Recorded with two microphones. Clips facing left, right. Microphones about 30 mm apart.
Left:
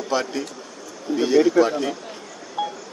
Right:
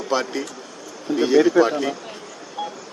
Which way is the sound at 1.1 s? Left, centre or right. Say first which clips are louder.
Right 1 dB; right.